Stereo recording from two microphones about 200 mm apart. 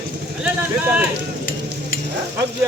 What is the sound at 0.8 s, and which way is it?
Speech, 5° right (ahead or behind).